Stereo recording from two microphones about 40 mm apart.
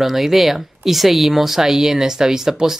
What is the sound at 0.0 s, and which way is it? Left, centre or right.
Speech, centre.